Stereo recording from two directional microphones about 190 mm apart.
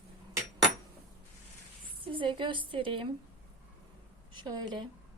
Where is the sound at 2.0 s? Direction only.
25° right (ahead or behind).